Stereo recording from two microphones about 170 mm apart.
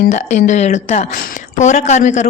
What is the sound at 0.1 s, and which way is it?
A man's voice, 45° left (ahead or behind).